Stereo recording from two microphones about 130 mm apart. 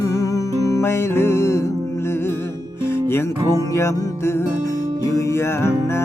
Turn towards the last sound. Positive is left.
turn(degrees=20)  # may be behind; listen again after turning